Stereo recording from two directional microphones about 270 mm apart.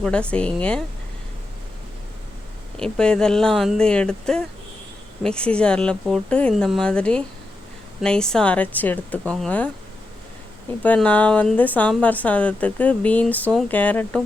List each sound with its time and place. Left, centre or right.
0.0 s a woman's voice: centre
2.7 s a woman's voice: centre
10.8 s a woman's voice: centre